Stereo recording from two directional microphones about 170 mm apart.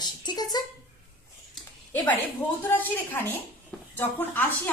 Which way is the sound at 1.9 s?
10° left (ahead or behind).